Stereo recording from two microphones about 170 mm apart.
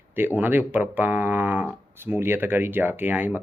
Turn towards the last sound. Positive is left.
turn(degrees=-10)  # may be behind; listen again after turning